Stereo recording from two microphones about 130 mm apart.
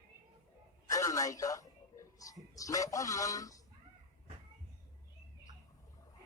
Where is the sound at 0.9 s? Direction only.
25° left (ahead or behind).